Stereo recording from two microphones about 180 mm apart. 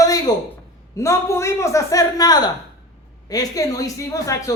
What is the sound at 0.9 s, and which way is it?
A woman's voice, 15° left (ahead or behind).